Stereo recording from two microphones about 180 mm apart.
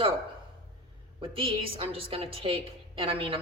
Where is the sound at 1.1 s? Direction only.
30° right (ahead or behind).